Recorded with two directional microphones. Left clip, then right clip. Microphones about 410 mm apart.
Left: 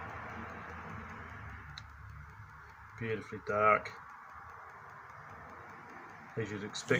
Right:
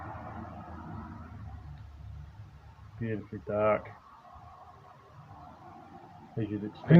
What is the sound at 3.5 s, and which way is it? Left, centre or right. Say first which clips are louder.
Speech: even; right.